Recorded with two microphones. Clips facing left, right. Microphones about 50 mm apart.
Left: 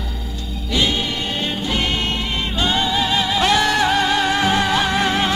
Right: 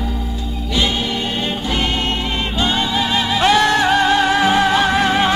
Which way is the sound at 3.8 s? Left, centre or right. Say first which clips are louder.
Right 3 dB; right.